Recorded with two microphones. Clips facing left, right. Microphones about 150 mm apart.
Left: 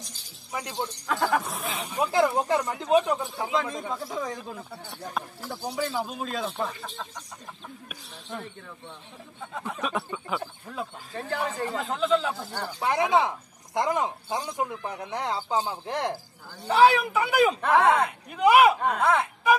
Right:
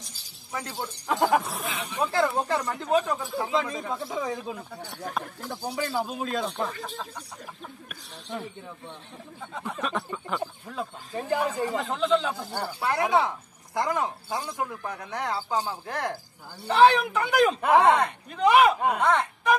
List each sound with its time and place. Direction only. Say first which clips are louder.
0.5 s speech: left 2 dB; 15° left (ahead or behind)
1.0 s speech: right 3 dB; 20° right (ahead or behind)
1.4 s speech: even; centre (ahead or behind)
2.1 s speech: left 3 dB; 15° left (ahead or behind)
3.5 s speech: left 1 dB; centre (ahead or behind)
5.6 s speech: even; 10° right (ahead or behind)
9.5 s speech: even; centre (ahead or behind)
11.1 s speech: right 3 dB; 15° right (ahead or behind)
11.8 s speech: left 1 dB; centre (ahead or behind)
12.4 s speech: right 2 dB; 10° right (ahead or behind)
12.8 s speech: left 1 dB; 20° left (ahead or behind)
16.6 s speech: right 1 dB; 10° left (ahead or behind)
17.6 s speech: right 2 dB; 10° right (ahead or behind)
17.9 s speech: even; 10° left (ahead or behind)